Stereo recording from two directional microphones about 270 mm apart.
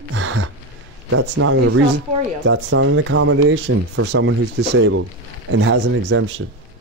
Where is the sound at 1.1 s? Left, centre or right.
Right.